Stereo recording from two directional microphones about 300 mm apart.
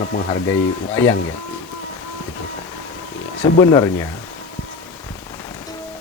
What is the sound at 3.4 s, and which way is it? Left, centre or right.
Speech, centre.